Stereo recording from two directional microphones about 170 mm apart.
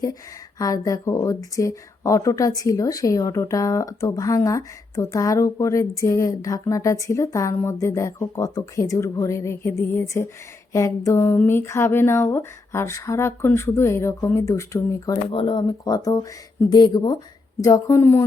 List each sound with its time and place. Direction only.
0.6 s speech: 20° left (ahead or behind)
15.3 s speech: 30° left (ahead or behind); by 18.3 s 15° left (ahead or behind)